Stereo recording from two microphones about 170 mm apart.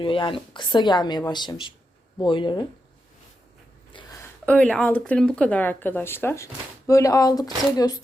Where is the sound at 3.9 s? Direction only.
25° left (ahead or behind).